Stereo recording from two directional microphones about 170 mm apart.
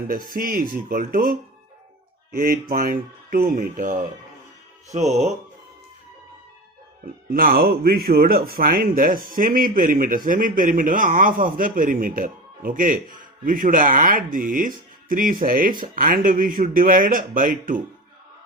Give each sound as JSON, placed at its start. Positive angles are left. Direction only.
{"t": 0.1, "sound": "speech", "side_deg": -55}
{"t": 4.9, "sound": "a man's voice", "side_deg": -40}
{"t": 7.0, "sound": "a man's voice", "side_deg": -60}